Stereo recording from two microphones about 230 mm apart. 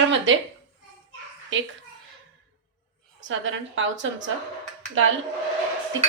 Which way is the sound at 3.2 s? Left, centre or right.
Right.